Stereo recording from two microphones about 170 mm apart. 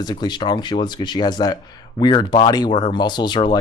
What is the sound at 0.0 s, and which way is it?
Speech, 25° left (ahead or behind).